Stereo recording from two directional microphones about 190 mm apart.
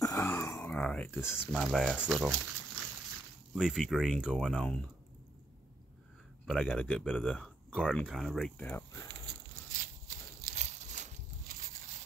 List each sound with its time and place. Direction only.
0.0 s speech: 15° left (ahead or behind); by 2.3 s 5° right (ahead or behind)
3.5 s speech: 5° right (ahead or behind)
6.4 s speech: 5° left (ahead or behind)
9.8 s a sound: 45° right (ahead or behind)